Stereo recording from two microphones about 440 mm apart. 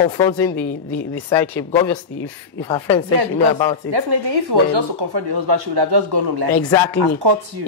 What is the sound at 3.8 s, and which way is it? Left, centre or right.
Speech, right.